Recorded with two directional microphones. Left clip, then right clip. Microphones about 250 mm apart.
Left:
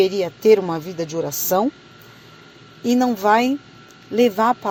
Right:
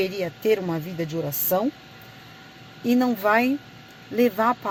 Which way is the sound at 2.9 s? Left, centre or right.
Centre.